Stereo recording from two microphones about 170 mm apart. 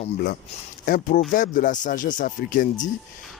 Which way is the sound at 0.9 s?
55° left (ahead or behind).